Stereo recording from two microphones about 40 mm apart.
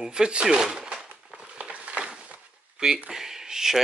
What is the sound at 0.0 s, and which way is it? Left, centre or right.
Speech, right.